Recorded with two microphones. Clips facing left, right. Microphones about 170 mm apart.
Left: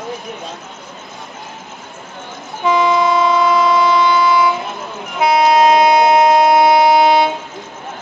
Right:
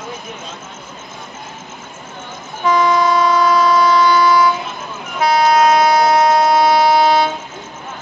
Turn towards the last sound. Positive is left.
turn(degrees=20)  # may be behind; listen again after turning